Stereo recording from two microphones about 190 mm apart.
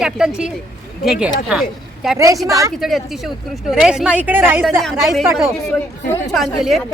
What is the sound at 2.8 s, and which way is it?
Speech, centre (ahead or behind).